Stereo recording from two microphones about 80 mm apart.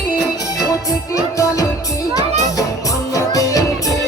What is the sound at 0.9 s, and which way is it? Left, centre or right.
Music, left.